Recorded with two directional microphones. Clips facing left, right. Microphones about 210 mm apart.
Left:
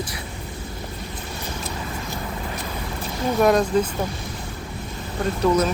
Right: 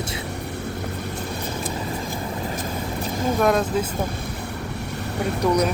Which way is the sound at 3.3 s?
Centre (ahead or behind).